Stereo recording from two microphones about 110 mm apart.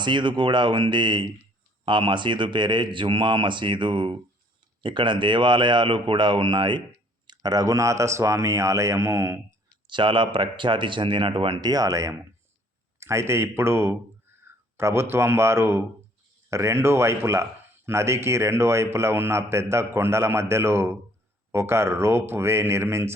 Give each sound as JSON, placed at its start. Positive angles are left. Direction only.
{"t": 0.0, "sound": "a man's voice", "side_deg": -45}
{"t": 9.8, "sound": "a man's voice", "side_deg": -45}
{"t": 11.6, "sound": "speech", "side_deg": -35}
{"t": 14.4, "sound": "a sound", "side_deg": -25}
{"t": 15.1, "sound": "speech", "side_deg": -25}